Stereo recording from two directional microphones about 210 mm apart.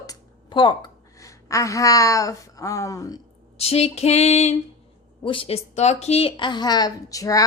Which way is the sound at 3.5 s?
30° left (ahead or behind).